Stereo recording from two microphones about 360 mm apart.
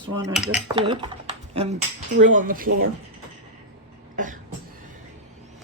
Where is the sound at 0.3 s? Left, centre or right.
Centre.